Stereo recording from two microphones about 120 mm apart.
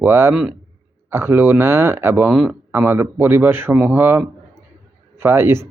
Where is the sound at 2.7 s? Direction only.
15° right (ahead or behind).